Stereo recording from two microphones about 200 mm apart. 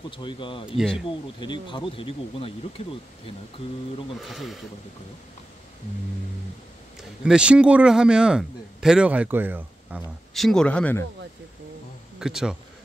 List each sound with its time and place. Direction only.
0.2 s speech: 25° left (ahead or behind)
0.7 s a man's voice: centre (ahead or behind)
1.0 s speech: 25° left (ahead or behind)
4.2 s a man's voice: centre (ahead or behind)
7.0 s a man's voice: 5° right (ahead or behind)
12.2 s a man's voice: 5° right (ahead or behind)